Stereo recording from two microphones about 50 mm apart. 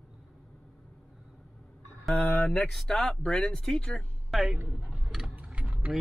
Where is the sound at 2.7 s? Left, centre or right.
Centre.